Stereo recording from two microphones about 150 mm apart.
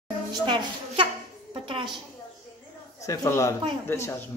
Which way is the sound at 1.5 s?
35° right (ahead or behind).